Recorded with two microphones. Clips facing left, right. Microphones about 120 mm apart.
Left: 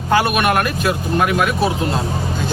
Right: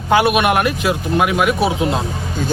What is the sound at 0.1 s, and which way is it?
Speech, 15° right (ahead or behind).